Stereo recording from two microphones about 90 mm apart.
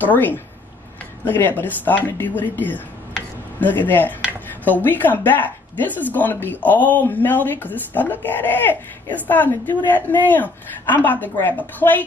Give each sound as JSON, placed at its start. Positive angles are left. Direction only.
{"t": 0.0, "sound": "speech", "side_deg": 20}